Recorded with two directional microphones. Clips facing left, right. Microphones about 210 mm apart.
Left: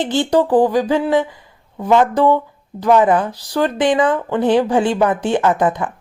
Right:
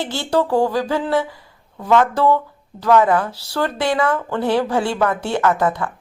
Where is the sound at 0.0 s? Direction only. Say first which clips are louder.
Left 4 dB; 20° left (ahead or behind).